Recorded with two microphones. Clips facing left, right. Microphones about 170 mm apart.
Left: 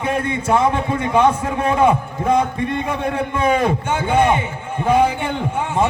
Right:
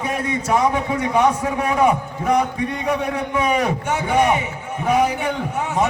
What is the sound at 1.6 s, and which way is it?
Speech, 25° left (ahead or behind).